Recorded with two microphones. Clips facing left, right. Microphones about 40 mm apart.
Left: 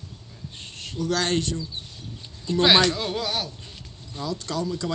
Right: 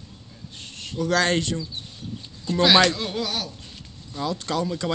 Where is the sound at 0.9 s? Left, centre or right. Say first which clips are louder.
Right 3 dB; right.